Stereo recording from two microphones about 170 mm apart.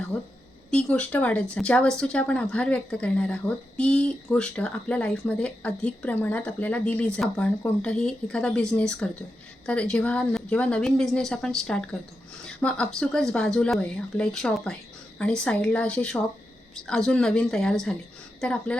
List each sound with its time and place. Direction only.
0.7 s a woman's voice: 5° left (ahead or behind)